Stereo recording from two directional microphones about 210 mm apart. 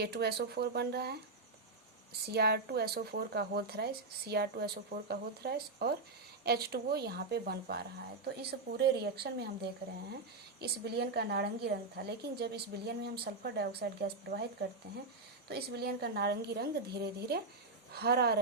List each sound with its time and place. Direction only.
0.0 s speech: 50° right (ahead or behind)
2.3 s speech: 50° right (ahead or behind)
10.6 s speech: 50° right (ahead or behind)
15.4 s speech: 50° right (ahead or behind)